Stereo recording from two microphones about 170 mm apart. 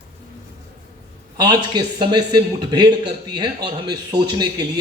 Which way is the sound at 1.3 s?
25° right (ahead or behind).